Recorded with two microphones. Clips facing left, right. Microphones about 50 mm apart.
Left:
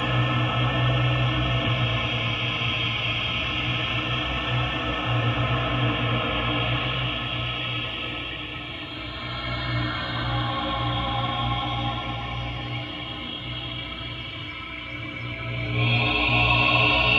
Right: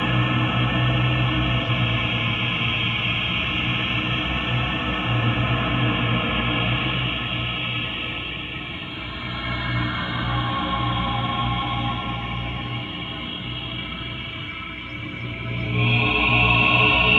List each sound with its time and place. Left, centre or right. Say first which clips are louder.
0.0 s music: right 3 dB; centre
9.5 s music: right 3 dB; right
15.7 s music: right 3 dB; right